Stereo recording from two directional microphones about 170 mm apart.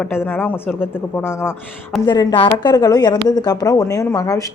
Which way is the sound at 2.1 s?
25° left (ahead or behind).